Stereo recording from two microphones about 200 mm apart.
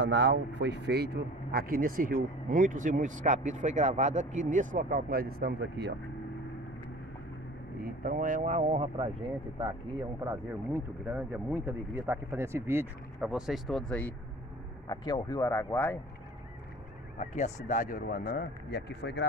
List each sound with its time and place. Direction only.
0.0 s speech: 60° right (ahead or behind)
7.8 s speech: 45° right (ahead or behind); by 9.1 s 30° right (ahead or behind)
10.2 s speech: 10° right (ahead or behind); by 14.1 s 5° left (ahead or behind)
14.9 s speech: 20° left (ahead or behind)
17.2 s speech: 35° left (ahead or behind); by 19.2 s 60° left (ahead or behind)